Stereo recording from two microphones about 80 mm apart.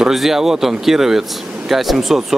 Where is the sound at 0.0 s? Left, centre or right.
Centre.